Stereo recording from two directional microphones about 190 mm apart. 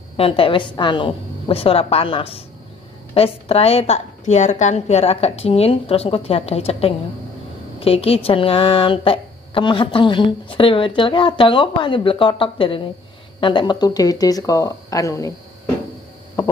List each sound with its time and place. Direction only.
0.2 s a woman's voice: 30° left (ahead or behind)